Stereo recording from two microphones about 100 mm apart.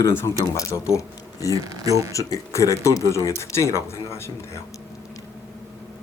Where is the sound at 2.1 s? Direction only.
30° left (ahead or behind).